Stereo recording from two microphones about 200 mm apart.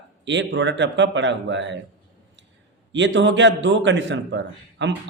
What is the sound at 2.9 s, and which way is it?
A man's voice, 65° right (ahead or behind).